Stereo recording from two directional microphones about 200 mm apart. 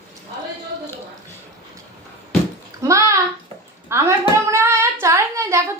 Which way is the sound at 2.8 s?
15° right (ahead or behind).